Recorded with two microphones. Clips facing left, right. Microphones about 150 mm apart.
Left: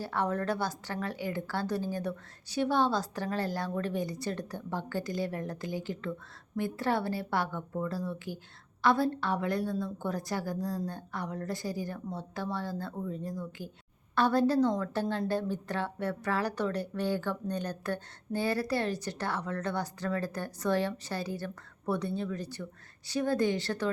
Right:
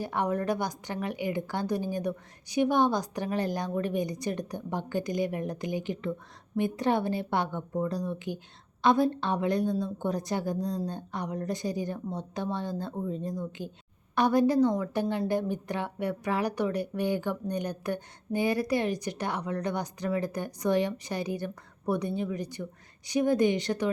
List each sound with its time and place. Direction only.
0.0 s a woman's voice: 15° right (ahead or behind)